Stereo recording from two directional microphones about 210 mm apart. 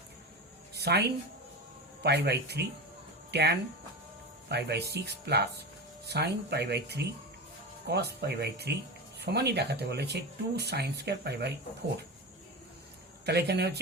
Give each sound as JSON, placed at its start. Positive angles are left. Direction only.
{"t": 0.7, "sound": "a sound", "side_deg": -50}
{"t": 2.0, "sound": "speech", "side_deg": -50}
{"t": 13.2, "sound": "speech", "side_deg": -50}